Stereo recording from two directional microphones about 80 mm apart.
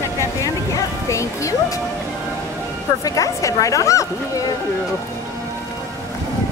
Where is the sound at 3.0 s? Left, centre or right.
Left.